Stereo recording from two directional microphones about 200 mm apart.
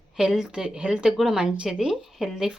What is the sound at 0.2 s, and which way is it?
Speech, 5° right (ahead or behind).